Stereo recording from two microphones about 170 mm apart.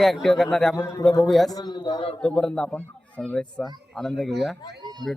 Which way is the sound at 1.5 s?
25° left (ahead or behind).